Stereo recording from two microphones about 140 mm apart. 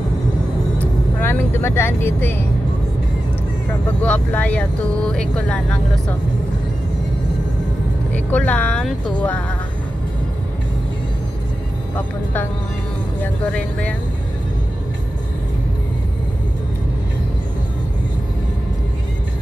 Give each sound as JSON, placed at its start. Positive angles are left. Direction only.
{"t": 1.2, "sound": "speech", "side_deg": 15}
{"t": 4.0, "sound": "speech", "side_deg": 10}
{"t": 8.1, "sound": "speech", "side_deg": 10}
{"t": 13.2, "sound": "speech", "side_deg": 10}